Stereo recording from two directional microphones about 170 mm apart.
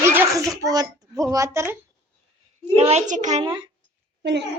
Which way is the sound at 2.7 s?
40° right (ahead or behind).